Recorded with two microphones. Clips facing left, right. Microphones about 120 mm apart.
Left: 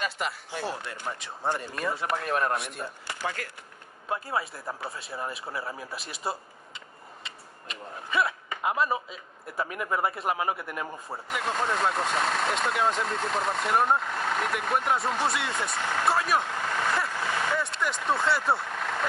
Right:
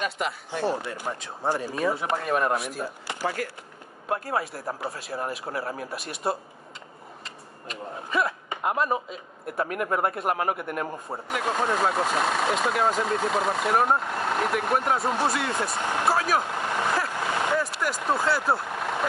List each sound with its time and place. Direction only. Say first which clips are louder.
0.0 s speech: right 3 dB; centre (ahead or behind)
4.3 s speech: right 3 dB; centre (ahead or behind)
15.7 s speech: right 2 dB; 20° right (ahead or behind)
16.1 s speech: right 1 dB; centre (ahead or behind)
16.4 s speech: right 2 dB; 15° right (ahead or behind)
17.1 s vehicle: right 3 dB; 20° right (ahead or behind)
17.6 s speech: right 3 dB; 5° right (ahead or behind)
18.7 s vehicle: right 3 dB; 15° right (ahead or behind)